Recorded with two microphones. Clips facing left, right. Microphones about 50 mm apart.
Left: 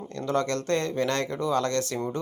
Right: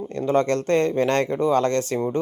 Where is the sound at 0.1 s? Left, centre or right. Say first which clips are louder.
Right 6 dB; right.